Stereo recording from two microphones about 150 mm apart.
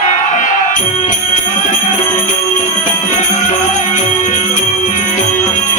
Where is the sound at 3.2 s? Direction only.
55° left (ahead or behind).